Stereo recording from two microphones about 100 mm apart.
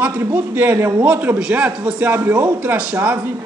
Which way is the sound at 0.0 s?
20° right (ahead or behind).